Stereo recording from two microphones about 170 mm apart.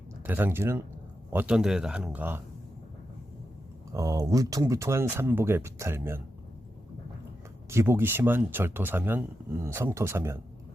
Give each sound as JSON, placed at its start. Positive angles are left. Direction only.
{"t": 0.3, "sound": "speech", "side_deg": -10}
{"t": 3.9, "sound": "speech", "side_deg": -20}
{"t": 7.7, "sound": "speech", "side_deg": -15}